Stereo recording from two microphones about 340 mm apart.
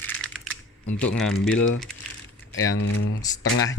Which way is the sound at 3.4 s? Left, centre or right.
Left.